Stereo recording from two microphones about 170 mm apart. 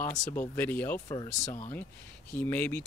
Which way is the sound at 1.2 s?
45° left (ahead or behind).